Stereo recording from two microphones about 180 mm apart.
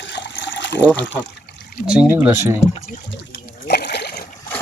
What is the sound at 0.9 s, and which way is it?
Speech, 90° left.